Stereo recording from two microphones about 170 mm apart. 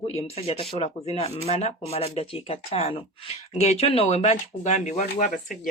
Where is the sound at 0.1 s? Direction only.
35° left (ahead or behind).